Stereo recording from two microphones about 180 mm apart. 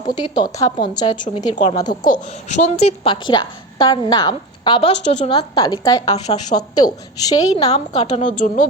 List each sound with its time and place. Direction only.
0.0 s a woman's voice: 25° left (ahead or behind)
1.1 s a woman's voice: 45° left (ahead or behind)
1.8 s a woman's voice: 25° left (ahead or behind)
2.5 s a woman's voice: 40° left (ahead or behind)
5.0 s a woman's voice: 40° left (ahead or behind)
5.3 s a woman's voice: 25° left (ahead or behind)
6.1 s a woman's voice: 40° left (ahead or behind)
6.6 s a woman's voice: 20° left (ahead or behind)
7.6 s a woman's voice: 35° left (ahead or behind)